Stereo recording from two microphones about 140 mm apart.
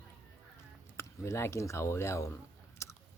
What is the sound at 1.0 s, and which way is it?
Speech, 20° left (ahead or behind).